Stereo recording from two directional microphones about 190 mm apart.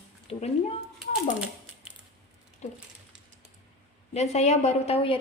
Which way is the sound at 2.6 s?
35° left (ahead or behind).